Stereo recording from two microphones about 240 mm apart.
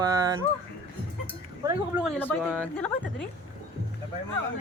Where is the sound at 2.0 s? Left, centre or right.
Centre.